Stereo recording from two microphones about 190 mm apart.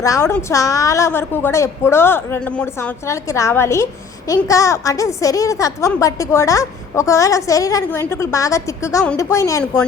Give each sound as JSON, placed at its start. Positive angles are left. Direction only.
{"t": 0.0, "sound": "a woman's voice", "side_deg": 15}